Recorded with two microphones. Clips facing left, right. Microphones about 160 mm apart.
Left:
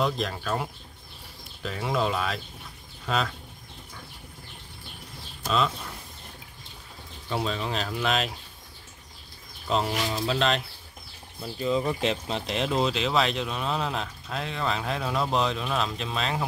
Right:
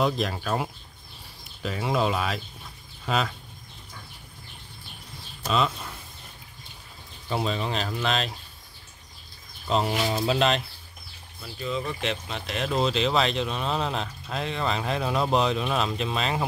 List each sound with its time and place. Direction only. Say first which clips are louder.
0.0 s speech: right 2 dB; 10° right (ahead or behind)
7.2 s speech: right 1 dB; 5° right (ahead or behind)
9.7 s speech: right 1 dB; centre (ahead or behind)
10.1 s speech: right 3 dB; 20° right (ahead or behind)
11.4 s speech: left 5 dB; 25° left (ahead or behind); by 16.4 s 5° right (ahead or behind)